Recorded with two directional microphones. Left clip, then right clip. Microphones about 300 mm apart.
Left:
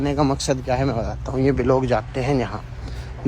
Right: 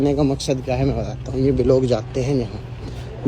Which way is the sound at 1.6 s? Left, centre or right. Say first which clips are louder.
Right 4 dB; centre.